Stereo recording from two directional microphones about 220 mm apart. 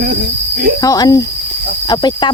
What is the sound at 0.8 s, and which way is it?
Speech, 15° left (ahead or behind).